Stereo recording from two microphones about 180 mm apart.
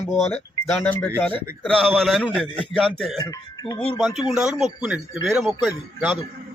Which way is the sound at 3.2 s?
20° left (ahead or behind).